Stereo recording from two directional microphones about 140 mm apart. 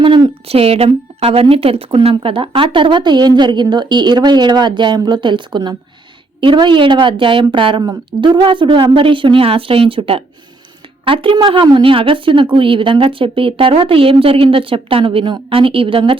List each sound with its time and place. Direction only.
0.0 s speech: 35° right (ahead or behind)